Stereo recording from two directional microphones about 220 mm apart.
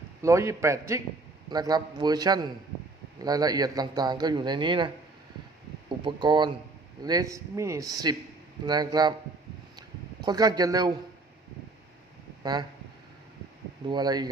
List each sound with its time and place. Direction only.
0.2 s a man's voice: 15° right (ahead or behind)
6.1 s a man's voice: 20° right (ahead or behind)
10.2 s a man's voice: 20° right (ahead or behind)
12.4 s speech: 20° right (ahead or behind)
13.8 s a man's voice: 20° right (ahead or behind)